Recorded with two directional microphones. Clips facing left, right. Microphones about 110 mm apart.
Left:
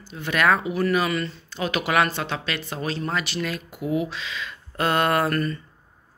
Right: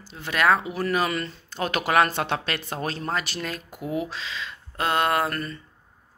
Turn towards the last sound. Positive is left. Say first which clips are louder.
# left 3 dB
turn(degrees=-20)  # may be behind; listen again after turning